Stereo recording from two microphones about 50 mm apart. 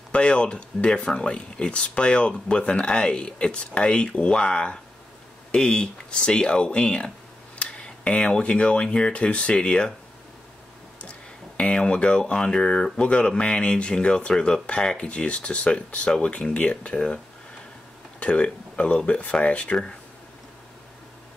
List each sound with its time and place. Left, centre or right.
0.1 s speech: left
11.1 s music: left
11.8 s speech: centre
18.2 s speech: left